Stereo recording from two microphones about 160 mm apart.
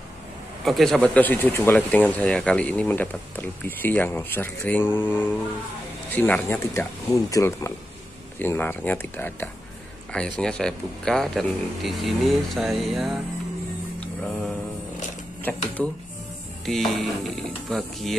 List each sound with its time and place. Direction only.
0.7 s speech: centre (ahead or behind)
13.9 s music: 10° left (ahead or behind)
15.8 s speech: 5° left (ahead or behind)